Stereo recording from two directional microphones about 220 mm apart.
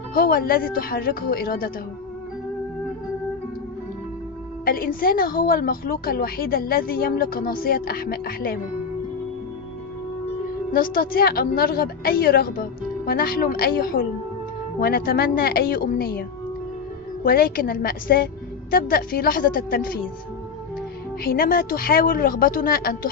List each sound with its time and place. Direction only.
0.1 s a woman's voice: 40° left (ahead or behind)
4.6 s a woman's voice: 40° left (ahead or behind)
10.7 s a woman's voice: 40° left (ahead or behind)
17.2 s a woman's voice: 40° left (ahead or behind)
21.2 s a woman's voice: 40° left (ahead or behind)